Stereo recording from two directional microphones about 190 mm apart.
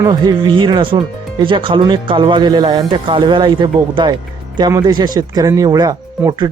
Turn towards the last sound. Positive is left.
turn(degrees=-20)  # may be behind; listen again after turning